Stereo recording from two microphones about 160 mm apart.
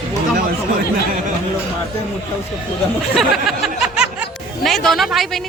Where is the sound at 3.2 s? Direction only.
Centre (ahead or behind).